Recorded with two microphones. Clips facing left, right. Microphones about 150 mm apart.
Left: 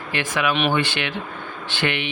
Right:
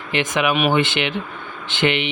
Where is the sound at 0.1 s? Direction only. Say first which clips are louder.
Right 3 dB; 20° right (ahead or behind).